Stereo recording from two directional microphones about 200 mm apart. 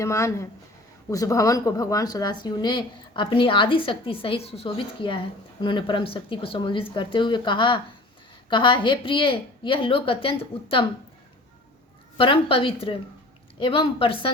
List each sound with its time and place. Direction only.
0.0 s speech: 15° left (ahead or behind)
12.1 s speech: 25° left (ahead or behind)